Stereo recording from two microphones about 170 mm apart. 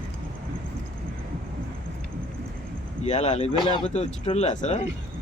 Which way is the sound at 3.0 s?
40° left (ahead or behind).